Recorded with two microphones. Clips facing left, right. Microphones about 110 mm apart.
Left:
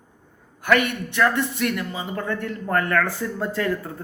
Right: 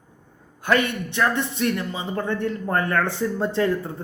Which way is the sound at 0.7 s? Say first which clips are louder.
Left 1 dB; 25° right (ahead or behind).